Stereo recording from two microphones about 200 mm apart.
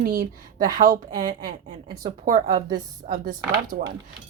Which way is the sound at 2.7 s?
45° right (ahead or behind).